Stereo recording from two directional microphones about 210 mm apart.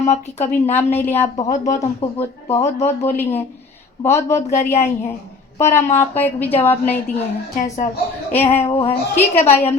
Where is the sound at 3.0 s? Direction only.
10° left (ahead or behind).